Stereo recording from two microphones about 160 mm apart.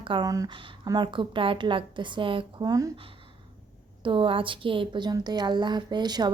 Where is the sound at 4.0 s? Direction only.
30° right (ahead or behind).